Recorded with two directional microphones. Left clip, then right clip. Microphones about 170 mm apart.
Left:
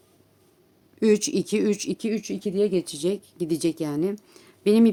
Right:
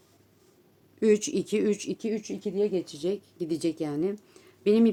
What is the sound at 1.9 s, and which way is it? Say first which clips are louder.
Speech: left 3 dB; 45° left (ahead or behind).